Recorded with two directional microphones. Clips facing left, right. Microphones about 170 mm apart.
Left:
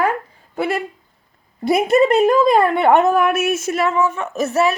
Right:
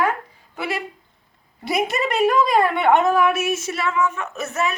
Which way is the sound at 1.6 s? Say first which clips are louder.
Left 8 dB; 55° left (ahead or behind).